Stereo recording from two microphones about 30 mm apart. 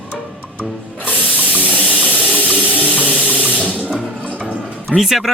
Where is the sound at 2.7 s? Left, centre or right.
Right.